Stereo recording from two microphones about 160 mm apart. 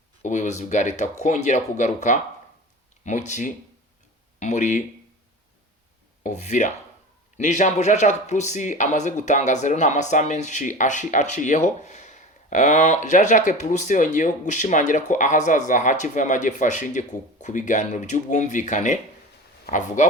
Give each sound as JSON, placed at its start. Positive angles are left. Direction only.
{"t": 0.2, "sound": "speech", "side_deg": 50}
{"t": 6.2, "sound": "speech", "side_deg": 50}